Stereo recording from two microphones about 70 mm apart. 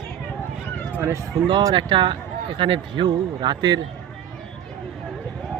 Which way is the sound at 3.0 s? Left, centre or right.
Right.